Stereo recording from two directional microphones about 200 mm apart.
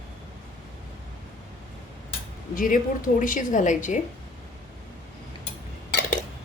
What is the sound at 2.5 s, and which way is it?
A woman's voice, 45° left (ahead or behind).